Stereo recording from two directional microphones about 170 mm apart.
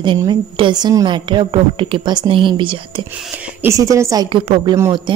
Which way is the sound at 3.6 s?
20° right (ahead or behind).